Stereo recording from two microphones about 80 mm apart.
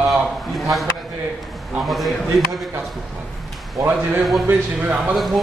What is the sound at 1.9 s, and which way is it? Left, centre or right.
Speech, centre.